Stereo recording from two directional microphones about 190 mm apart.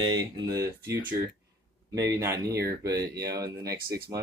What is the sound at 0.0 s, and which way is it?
Speech, 20° right (ahead or behind).